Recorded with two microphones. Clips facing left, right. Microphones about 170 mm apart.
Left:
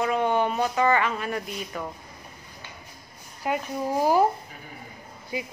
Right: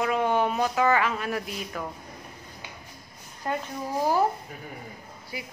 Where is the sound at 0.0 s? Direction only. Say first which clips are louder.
Left 1 dB; centre (ahead or behind).